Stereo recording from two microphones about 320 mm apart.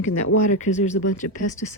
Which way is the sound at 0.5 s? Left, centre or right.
Left.